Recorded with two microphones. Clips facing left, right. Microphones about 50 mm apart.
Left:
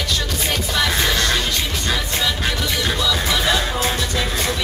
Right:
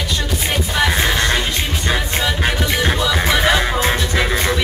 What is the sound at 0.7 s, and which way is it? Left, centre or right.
Music, right.